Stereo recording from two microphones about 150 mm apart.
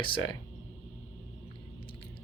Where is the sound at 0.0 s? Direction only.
35° left (ahead or behind).